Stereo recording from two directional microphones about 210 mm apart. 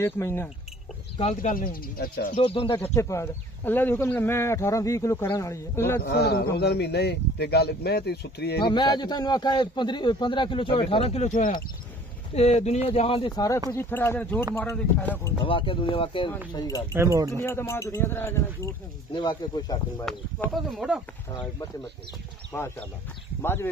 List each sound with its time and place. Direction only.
0.0 s speech: 10° left (ahead or behind)
1.1 s speech: 35° left (ahead or behind)
2.3 s a man's voice: 25° left (ahead or behind)
2.8 s speech: 15° left (ahead or behind)
6.0 s speech: 50° left (ahead or behind)
8.5 s a man's voice: 20° left (ahead or behind)
13.7 s speech: 10° left (ahead or behind)
15.4 s a man's voice: 25° left (ahead or behind)
16.9 s speech: 15° right (ahead or behind)
17.4 s a man's voice: 10° left (ahead or behind)
20.1 s speech: 5° left (ahead or behind)
22.5 s speech: 10° left (ahead or behind)